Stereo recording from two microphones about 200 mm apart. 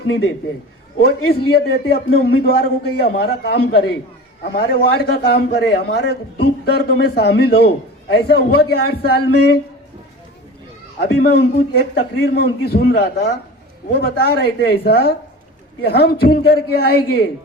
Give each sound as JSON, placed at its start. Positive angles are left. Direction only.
{"t": 0.9, "sound": "a man's voice", "side_deg": 50}
{"t": 11.0, "sound": "a man's voice", "side_deg": 55}